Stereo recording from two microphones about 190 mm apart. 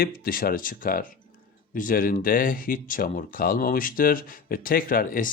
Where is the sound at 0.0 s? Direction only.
50° left (ahead or behind).